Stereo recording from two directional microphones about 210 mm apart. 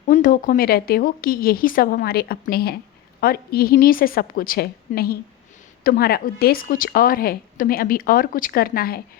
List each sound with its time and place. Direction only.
0.1 s a woman's voice: 40° left (ahead or behind)